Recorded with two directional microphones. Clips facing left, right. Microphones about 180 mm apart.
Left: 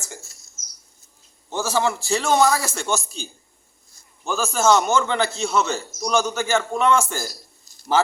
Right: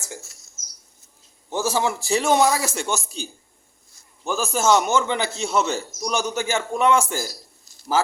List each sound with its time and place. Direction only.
1.5 s a man's voice: 15° right (ahead or behind)
4.3 s a man's voice: 15° right (ahead or behind)